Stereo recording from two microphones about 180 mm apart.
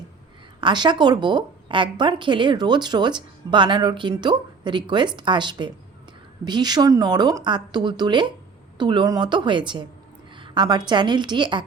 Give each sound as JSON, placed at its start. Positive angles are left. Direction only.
{"t": 0.6, "sound": "a woman's voice", "side_deg": -25}